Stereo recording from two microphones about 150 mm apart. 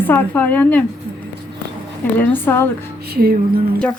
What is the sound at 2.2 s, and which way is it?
Speech, 15° left (ahead or behind).